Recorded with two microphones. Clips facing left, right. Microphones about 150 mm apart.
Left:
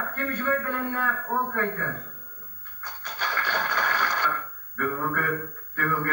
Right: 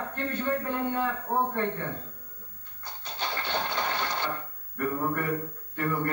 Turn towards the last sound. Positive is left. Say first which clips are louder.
# even
turn(degrees=-25)  # may be behind; listen again after turning